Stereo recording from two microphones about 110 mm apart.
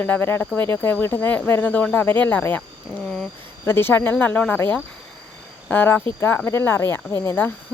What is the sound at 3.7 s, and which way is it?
Speech, 20° left (ahead or behind).